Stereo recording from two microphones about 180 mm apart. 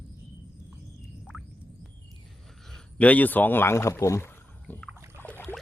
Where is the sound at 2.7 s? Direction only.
5° left (ahead or behind).